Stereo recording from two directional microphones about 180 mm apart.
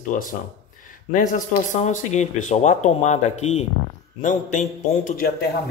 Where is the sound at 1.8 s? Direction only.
40° left (ahead or behind).